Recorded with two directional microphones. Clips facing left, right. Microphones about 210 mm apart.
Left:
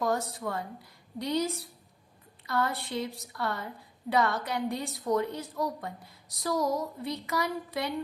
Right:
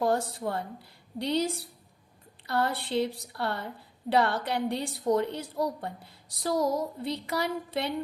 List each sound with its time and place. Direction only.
0.0 s a woman's voice: 30° right (ahead or behind)